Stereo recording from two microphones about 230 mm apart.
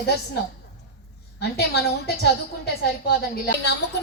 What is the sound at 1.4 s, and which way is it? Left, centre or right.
A woman's voice, left.